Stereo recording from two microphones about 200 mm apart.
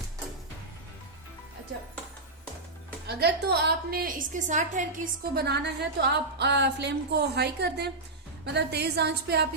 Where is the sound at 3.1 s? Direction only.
55° right (ahead or behind); by 4.8 s 40° right (ahead or behind).